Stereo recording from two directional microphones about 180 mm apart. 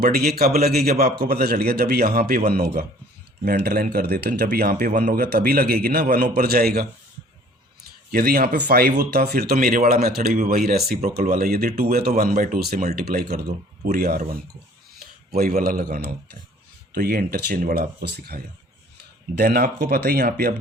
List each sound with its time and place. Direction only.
0.0 s a man's voice: 60° right (ahead or behind)
8.1 s a man's voice: 55° right (ahead or behind)
15.3 s a man's voice: 55° right (ahead or behind)